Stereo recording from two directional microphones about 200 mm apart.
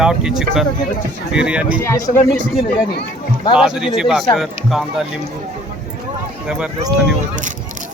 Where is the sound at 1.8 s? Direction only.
15° left (ahead or behind).